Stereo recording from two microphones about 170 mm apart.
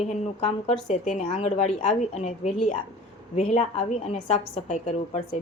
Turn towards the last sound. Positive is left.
turn(degrees=40)  # may be behind; listen again after turning